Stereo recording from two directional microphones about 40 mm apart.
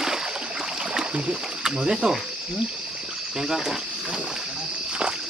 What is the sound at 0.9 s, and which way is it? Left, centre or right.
Rowboat, centre.